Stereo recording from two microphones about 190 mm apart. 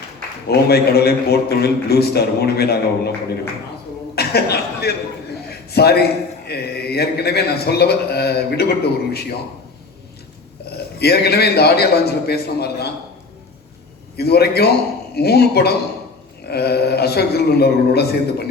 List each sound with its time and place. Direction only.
0.4 s a man's voice: 55° left (ahead or behind)
4.1 s a man's voice: 55° left (ahead or behind)
10.7 s a man's voice: 55° left (ahead or behind)
14.2 s a man's voice: 55° left (ahead or behind)